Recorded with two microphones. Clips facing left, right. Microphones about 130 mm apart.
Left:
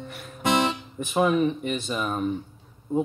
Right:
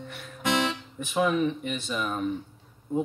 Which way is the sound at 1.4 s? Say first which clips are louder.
Left 3 dB; 40° left (ahead or behind).